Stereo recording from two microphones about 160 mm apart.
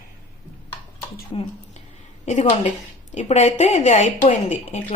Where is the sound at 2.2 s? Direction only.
45° left (ahead or behind).